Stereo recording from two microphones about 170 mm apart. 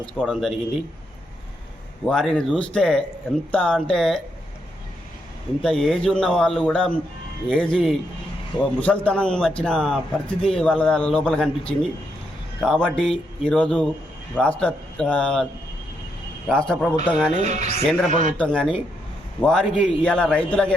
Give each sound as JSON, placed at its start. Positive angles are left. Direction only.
{"t": 0.0, "sound": "a man's voice", "side_deg": 0}
{"t": 2.0, "sound": "a man's voice", "side_deg": 5}
{"t": 5.6, "sound": "a man's voice", "side_deg": 0}
{"t": 16.5, "sound": "a man's voice", "side_deg": 5}
{"t": 17.4, "sound": "speech", "side_deg": -40}
{"t": 17.8, "sound": "a man's voice", "side_deg": 0}